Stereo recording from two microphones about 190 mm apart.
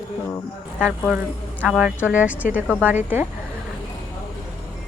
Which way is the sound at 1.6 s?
Centre (ahead or behind).